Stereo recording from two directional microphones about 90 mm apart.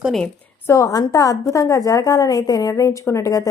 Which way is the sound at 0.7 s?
35° left (ahead or behind).